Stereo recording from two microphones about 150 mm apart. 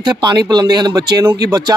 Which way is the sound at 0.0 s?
30° right (ahead or behind).